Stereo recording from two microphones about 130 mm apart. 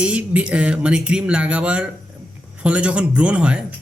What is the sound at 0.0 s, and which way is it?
A man's voice, 10° right (ahead or behind).